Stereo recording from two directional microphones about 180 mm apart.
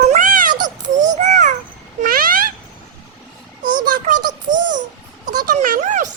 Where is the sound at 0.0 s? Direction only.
45° right (ahead or behind).